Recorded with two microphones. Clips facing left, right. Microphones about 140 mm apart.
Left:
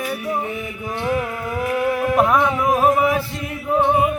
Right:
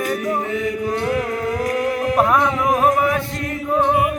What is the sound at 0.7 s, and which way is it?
Mantra, 40° right (ahead or behind).